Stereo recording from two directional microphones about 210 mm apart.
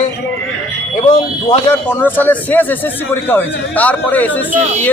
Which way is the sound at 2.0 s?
10° left (ahead or behind).